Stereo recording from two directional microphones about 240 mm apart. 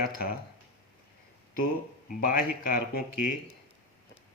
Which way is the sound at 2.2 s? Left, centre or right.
Left.